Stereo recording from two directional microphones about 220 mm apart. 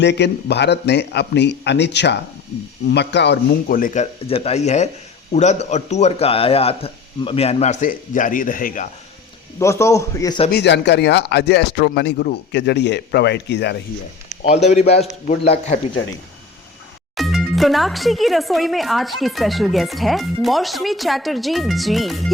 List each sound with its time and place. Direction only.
0.0 s speech: 50° left (ahead or behind)
9.6 s a man's voice: 15° left (ahead or behind)
10.5 s speech: 50° left (ahead or behind)
14.4 s a man's voice: 30° left (ahead or behind)
17.2 s speech: centre (ahead or behind)